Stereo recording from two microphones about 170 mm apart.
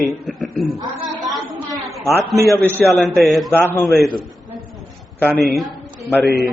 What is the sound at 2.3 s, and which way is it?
A man's voice, centre (ahead or behind).